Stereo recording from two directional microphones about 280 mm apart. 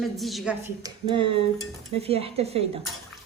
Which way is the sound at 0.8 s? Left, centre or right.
Centre.